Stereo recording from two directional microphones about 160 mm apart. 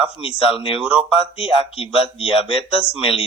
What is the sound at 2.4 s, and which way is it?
Speech, 5° right (ahead or behind).